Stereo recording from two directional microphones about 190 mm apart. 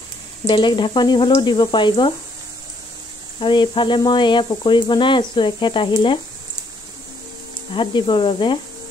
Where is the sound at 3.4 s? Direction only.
25° left (ahead or behind).